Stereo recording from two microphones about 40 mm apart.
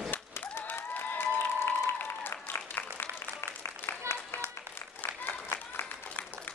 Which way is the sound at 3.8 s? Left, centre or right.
Left.